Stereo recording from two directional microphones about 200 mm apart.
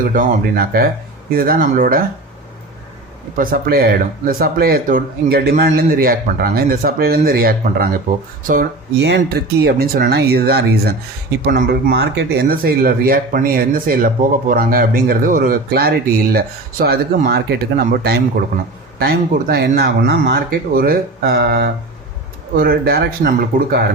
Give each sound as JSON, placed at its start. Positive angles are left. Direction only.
{"t": 0.0, "sound": "speech", "side_deg": -45}
{"t": 3.3, "sound": "speech", "side_deg": -45}
{"t": 9.0, "sound": "speech", "side_deg": -60}